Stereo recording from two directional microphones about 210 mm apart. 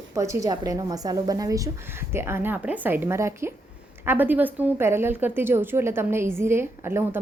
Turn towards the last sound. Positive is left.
turn(degrees=-10)  # may be behind; listen again after turning